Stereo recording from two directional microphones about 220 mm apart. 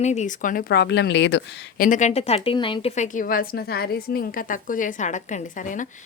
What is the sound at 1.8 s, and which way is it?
A woman's voice, 35° left (ahead or behind).